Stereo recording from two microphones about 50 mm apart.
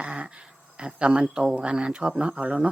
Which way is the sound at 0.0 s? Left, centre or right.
Right.